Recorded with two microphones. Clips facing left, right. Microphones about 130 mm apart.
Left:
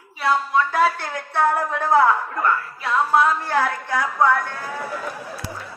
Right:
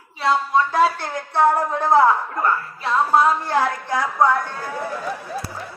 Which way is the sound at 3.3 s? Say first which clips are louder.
Right 1 dB; 15° right (ahead or behind).